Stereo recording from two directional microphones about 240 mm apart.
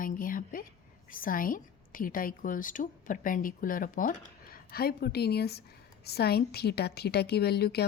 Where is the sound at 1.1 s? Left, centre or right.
Left.